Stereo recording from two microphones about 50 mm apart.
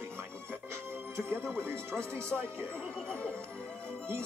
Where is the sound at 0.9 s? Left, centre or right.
Right.